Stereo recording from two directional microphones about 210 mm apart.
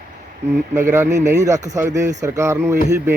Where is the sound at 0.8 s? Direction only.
10° right (ahead or behind).